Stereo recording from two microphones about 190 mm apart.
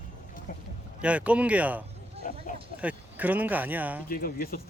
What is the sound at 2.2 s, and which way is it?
Speech, 45° left (ahead or behind).